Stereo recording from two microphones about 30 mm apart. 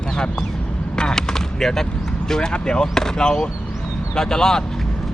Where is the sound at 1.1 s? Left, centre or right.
Centre.